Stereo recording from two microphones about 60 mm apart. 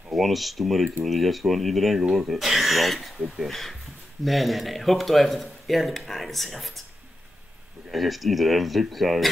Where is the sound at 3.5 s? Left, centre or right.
Centre.